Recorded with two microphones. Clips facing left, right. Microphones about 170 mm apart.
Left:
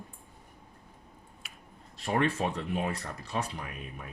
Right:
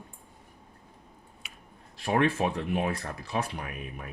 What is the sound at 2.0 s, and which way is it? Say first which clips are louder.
Speech: right 3 dB; 60° right (ahead or behind).